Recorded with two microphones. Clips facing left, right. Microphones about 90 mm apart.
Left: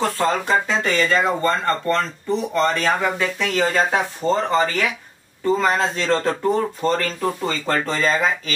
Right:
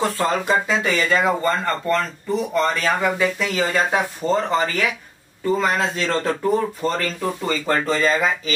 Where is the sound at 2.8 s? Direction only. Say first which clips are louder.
Right 1 dB; 5° right (ahead or behind).